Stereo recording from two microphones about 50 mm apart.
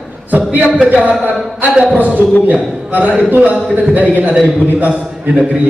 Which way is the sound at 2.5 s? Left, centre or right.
Right.